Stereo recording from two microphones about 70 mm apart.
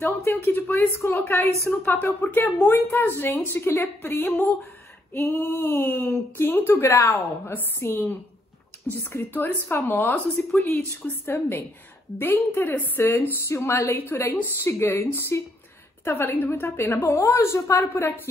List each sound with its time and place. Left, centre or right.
0.0 s a woman's voice: left
5.1 s a woman's voice: left
11.2 s speech: left